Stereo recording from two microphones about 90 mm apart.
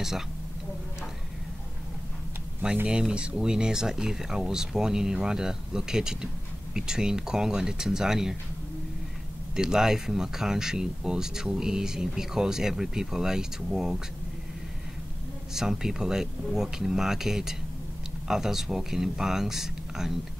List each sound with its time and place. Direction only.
2.9 s speech: 10° right (ahead or behind)
9.6 s speech: 5° right (ahead or behind)
15.5 s speech: 5° right (ahead or behind)